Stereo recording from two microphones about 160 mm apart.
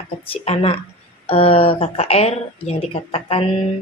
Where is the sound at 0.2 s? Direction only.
35° left (ahead or behind).